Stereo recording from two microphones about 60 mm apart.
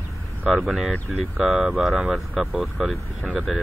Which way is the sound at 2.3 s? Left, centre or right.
Right.